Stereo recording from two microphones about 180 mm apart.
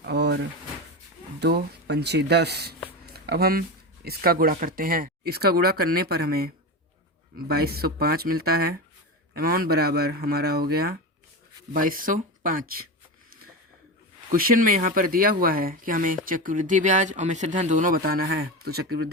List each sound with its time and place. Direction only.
0.1 s drawer open or close: 70° right (ahead or behind)
1.4 s speech: 65° right (ahead or behind)
3.1 s a sound: 60° right (ahead or behind)
4.0 s speech: 60° right (ahead or behind)
14.3 s speech: 50° right (ahead or behind)